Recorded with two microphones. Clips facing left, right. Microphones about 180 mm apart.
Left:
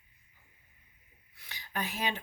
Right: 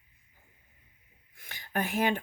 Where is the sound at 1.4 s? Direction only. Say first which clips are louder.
Right 5 dB; 50° right (ahead or behind).